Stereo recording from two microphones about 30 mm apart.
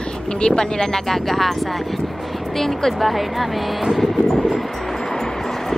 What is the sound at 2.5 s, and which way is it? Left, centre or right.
Speech, centre.